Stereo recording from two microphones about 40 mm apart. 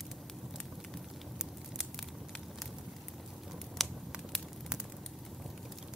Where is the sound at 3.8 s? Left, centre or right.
Centre.